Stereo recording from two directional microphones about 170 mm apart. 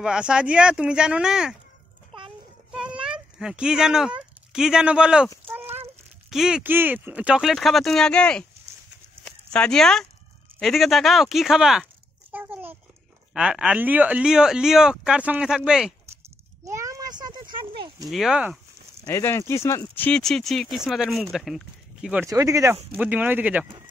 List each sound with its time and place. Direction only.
0.0 s speech: 5° right (ahead or behind)
2.7 s a child's voice: 5° right (ahead or behind)
5.5 s a sound: 15° right (ahead or behind)
6.3 s speech: 5° right (ahead or behind)
9.2 s dog: 5° left (ahead or behind)
10.6 s a sound: centre (ahead or behind)
13.3 s speech: 5° right (ahead or behind)
16.6 s a sound: 20° right (ahead or behind)
18.0 s speech: centre (ahead or behind)
19.0 s speech: 15° left (ahead or behind)
20.1 s speech: 5° left (ahead or behind)
22.3 s speech: 20° right (ahead or behind)